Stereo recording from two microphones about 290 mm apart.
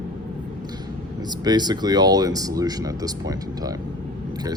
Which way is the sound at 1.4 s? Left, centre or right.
Centre.